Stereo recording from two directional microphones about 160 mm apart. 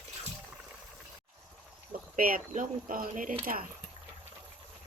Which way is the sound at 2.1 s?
55° right (ahead or behind).